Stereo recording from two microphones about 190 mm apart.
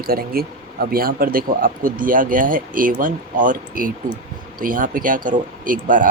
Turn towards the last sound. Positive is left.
turn(degrees=-45)  # may be behind; listen again after turning